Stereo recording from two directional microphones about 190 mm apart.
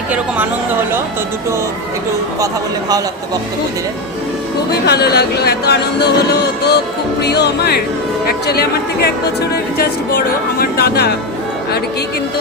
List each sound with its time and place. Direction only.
4.7 s speech: 55° left (ahead or behind)